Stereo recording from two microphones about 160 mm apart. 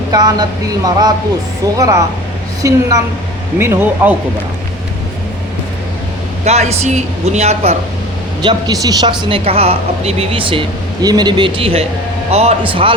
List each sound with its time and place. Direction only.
0.1 s speech: 25° right (ahead or behind)
6.4 s speech: 40° right (ahead or behind)
8.4 s speech: 25° right (ahead or behind)
9.4 s speech: 40° right (ahead or behind)